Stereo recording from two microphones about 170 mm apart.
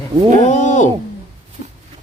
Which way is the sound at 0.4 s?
45° left (ahead or behind).